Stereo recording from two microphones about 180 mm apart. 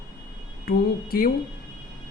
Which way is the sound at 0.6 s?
55° left (ahead or behind).